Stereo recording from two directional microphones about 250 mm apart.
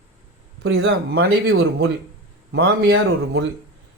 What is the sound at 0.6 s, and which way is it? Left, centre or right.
Speech, right.